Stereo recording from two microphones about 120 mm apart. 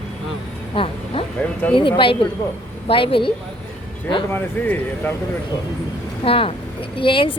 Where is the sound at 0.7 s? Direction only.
50° left (ahead or behind).